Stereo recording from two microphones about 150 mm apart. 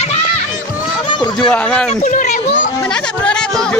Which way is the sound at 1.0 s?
30° left (ahead or behind).